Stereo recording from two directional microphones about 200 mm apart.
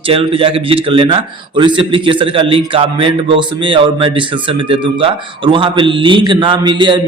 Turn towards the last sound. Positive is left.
turn(degrees=-25)  # may be behind; listen again after turning